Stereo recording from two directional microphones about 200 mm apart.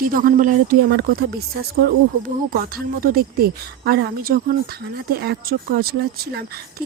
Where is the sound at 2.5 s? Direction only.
45° right (ahead or behind).